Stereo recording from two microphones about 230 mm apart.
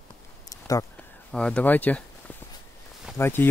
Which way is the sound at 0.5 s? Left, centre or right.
Centre.